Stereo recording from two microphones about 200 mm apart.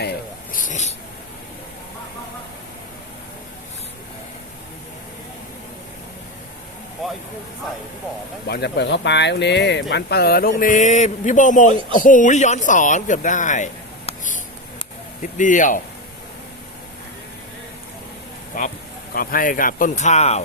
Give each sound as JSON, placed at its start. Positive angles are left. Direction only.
{"t": 0.5, "sound": "a sound", "side_deg": 40}
{"t": 8.4, "sound": "speech", "side_deg": 55}
{"t": 10.6, "sound": "speech", "side_deg": 40}
{"t": 14.1, "sound": "a sound", "side_deg": 40}
{"t": 15.2, "sound": "speech", "side_deg": 40}
{"t": 18.5, "sound": "speech", "side_deg": 40}